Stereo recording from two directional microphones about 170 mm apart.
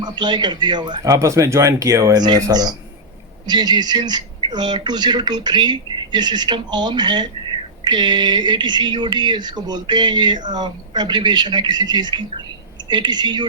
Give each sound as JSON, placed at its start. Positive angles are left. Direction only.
{"t": 0.0, "sound": "speech", "side_deg": -25}